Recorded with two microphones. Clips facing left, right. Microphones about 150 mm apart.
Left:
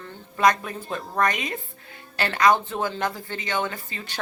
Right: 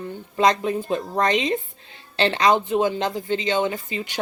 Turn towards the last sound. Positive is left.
turn(degrees=-20)  # may be behind; listen again after turning